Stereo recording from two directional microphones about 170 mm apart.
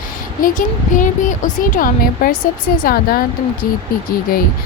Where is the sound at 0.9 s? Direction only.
50° left (ahead or behind).